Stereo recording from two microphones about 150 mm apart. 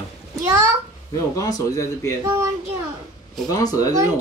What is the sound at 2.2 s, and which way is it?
Speech, 25° right (ahead or behind).